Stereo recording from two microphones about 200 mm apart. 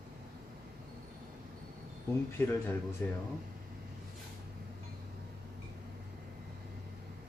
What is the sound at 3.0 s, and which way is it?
Speech, 10° left (ahead or behind).